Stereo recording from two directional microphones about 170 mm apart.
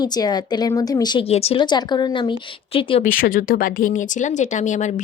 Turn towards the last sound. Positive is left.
turn(degrees=45)  # may be behind; listen again after turning